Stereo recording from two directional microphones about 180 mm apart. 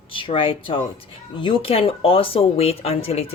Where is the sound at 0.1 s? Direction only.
30° left (ahead or behind).